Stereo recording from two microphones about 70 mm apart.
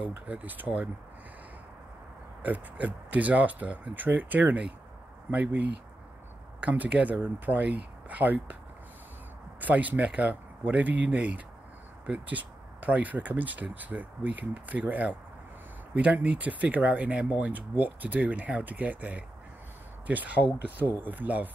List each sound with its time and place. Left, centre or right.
0.0 s speech: right
2.4 s speech: right
9.6 s speech: right